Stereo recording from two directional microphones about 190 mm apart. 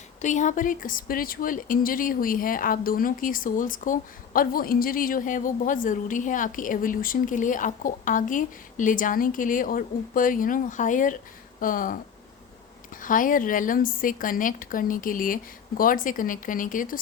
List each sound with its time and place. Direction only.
0.2 s a woman's voice: 40° left (ahead or behind)
13.0 s a woman's voice: 45° left (ahead or behind)